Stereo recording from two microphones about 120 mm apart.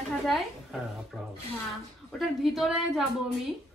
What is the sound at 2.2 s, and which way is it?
Speech, centre (ahead or behind).